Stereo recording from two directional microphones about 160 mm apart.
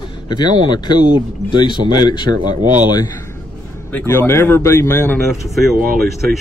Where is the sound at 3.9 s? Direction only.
15° left (ahead or behind).